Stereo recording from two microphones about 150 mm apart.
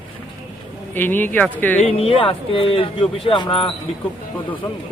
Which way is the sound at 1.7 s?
40° left (ahead or behind).